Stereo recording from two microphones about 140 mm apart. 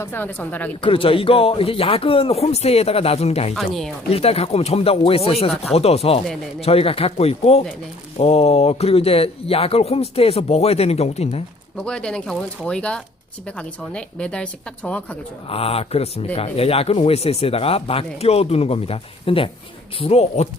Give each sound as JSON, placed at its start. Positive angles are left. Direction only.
{"t": 0.0, "sound": "a woman's voice", "side_deg": 15}
{"t": 0.8, "sound": "speech", "side_deg": 40}
{"t": 11.8, "sound": "a woman's voice", "side_deg": 5}
{"t": 15.4, "sound": "speech", "side_deg": 45}